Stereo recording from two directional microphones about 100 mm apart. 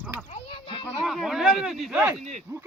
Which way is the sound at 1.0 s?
Centre (ahead or behind).